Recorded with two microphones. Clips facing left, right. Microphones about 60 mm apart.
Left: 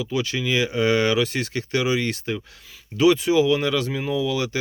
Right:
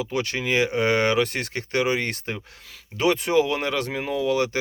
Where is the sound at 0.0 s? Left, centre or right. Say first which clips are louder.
Left 1 dB; right.